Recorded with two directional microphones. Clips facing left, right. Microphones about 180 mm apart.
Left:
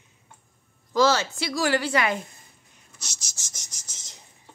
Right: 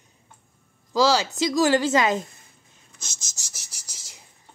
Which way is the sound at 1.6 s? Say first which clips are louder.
Right 4 dB; 20° right (ahead or behind).